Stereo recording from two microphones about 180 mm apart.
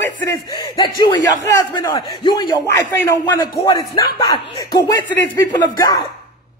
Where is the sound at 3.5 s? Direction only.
25° left (ahead or behind).